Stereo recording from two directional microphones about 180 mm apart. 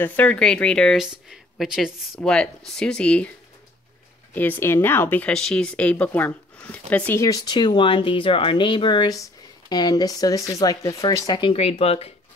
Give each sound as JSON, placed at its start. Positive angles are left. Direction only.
{"t": 0.0, "sound": "speech", "side_deg": 10}
{"t": 4.3, "sound": "speech", "side_deg": 10}